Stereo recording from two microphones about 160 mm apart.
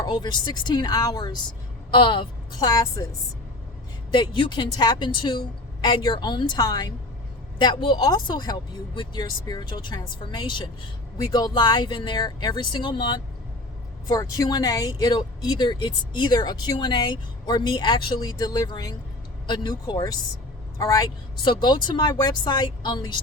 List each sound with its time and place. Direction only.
0.0 s speech: 30° left (ahead or behind)
4.1 s speech: 30° left (ahead or behind)